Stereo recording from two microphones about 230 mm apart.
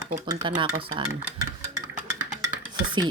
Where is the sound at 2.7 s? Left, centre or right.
Centre.